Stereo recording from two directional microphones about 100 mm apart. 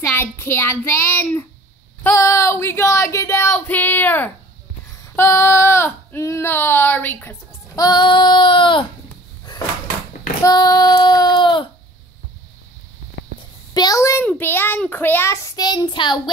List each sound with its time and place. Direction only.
0.1 s a sound: 25° left (ahead or behind)
7.7 s child singing: 40° left (ahead or behind)
10.4 s child singing: 40° left (ahead or behind)
13.7 s a child's voice: 35° left (ahead or behind)
14.4 s a sound: 20° left (ahead or behind)
15.5 s child singing: 45° left (ahead or behind)